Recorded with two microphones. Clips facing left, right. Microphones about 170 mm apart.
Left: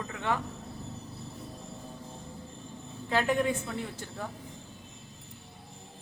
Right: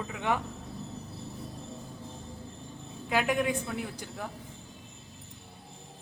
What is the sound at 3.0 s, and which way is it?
A woman's voice, 10° right (ahead or behind).